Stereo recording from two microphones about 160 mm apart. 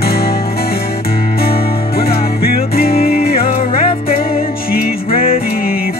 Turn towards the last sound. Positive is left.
turn(degrees=65)  # may be behind; listen again after turning